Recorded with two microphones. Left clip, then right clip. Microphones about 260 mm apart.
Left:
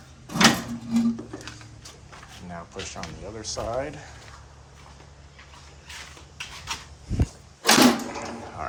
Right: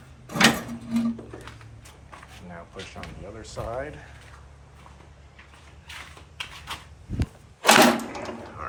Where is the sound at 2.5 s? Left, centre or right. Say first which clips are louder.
Left 4 dB; centre.